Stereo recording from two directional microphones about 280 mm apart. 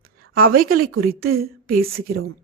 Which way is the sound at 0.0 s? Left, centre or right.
Right.